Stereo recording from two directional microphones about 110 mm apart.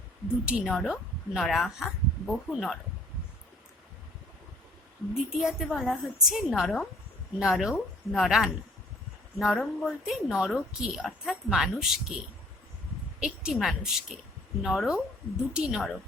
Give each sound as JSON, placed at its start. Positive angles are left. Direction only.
{"t": 0.4, "sound": "a woman's voice", "side_deg": -10}
{"t": 5.1, "sound": "speech", "side_deg": -5}